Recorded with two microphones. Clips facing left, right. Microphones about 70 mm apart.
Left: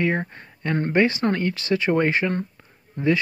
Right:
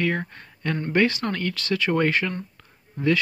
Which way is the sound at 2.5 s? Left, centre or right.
Centre.